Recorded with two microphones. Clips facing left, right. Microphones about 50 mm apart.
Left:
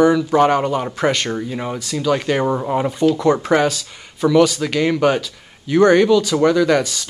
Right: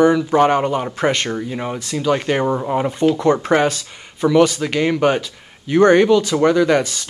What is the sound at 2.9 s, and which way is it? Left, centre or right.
Speech, right.